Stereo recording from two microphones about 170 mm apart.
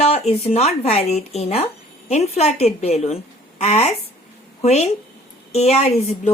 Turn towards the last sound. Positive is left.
turn(degrees=40)  # may be behind; listen again after turning